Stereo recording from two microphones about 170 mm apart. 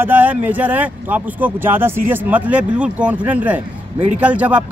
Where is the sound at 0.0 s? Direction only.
10° right (ahead or behind).